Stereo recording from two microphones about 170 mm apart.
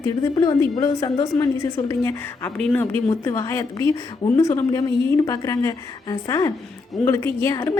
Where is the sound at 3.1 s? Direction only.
20° left (ahead or behind).